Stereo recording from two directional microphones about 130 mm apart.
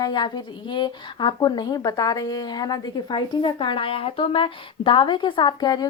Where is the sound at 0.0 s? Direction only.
35° left (ahead or behind).